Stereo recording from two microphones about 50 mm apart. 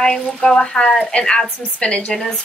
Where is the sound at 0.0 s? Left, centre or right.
Centre.